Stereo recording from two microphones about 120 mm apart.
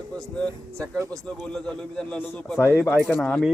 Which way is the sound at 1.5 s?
5° left (ahead or behind).